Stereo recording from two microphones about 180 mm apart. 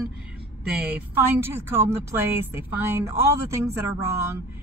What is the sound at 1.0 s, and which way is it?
Speech, 10° right (ahead or behind).